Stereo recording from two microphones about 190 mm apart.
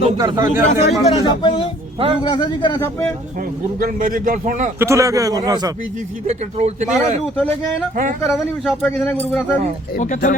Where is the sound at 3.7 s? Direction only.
45° right (ahead or behind).